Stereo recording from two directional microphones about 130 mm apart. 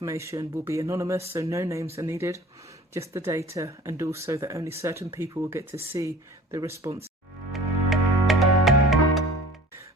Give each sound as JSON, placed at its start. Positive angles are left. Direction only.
{"t": 0.0, "sound": "speech", "side_deg": -25}
{"t": 7.5, "sound": "music", "side_deg": 0}